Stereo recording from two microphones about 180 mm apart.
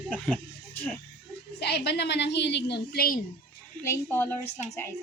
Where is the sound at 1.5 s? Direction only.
65° left (ahead or behind).